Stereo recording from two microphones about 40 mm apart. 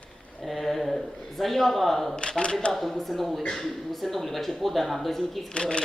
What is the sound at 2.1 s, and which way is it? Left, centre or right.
Speech, left.